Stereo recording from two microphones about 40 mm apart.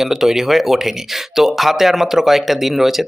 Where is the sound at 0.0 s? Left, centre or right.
Centre.